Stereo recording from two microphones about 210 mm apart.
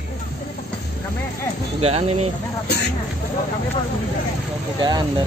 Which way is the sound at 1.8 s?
30° right (ahead or behind).